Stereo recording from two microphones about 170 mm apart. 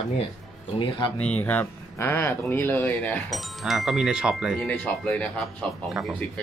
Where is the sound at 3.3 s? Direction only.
Centre (ahead or behind).